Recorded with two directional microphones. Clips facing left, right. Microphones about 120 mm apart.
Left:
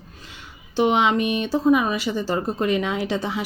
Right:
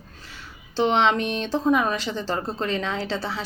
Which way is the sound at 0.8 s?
10° left (ahead or behind).